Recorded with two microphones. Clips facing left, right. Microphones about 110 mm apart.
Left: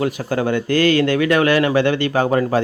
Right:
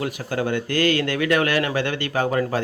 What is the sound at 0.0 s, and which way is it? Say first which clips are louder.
Speech: left 5 dB; 30° left (ahead or behind).